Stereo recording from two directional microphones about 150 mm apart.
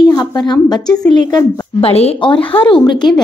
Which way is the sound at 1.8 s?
40° left (ahead or behind).